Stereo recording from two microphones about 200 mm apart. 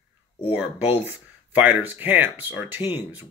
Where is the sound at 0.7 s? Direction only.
30° left (ahead or behind).